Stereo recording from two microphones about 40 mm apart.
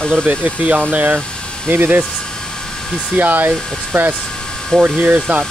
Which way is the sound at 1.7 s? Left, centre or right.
Right.